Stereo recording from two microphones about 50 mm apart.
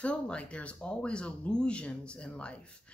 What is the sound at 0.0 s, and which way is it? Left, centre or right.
Speech, left.